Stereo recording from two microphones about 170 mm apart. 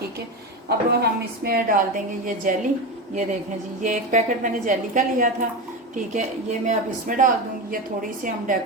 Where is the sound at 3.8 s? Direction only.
45° right (ahead or behind).